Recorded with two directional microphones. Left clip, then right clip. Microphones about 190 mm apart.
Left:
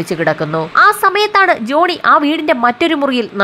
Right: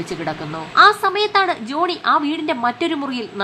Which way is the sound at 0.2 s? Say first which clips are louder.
Left 11 dB; 30° left (ahead or behind).